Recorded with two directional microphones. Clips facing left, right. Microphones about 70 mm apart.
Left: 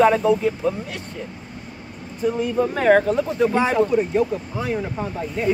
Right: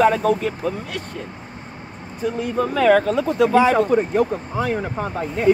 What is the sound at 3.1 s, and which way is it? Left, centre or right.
Speech, right.